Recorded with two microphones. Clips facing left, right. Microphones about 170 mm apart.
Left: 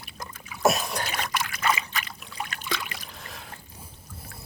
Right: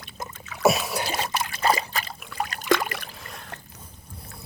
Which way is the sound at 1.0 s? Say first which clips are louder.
Right 3 dB; 30° right (ahead or behind).